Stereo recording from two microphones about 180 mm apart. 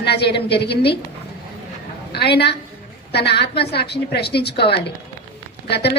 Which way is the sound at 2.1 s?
65° left (ahead or behind).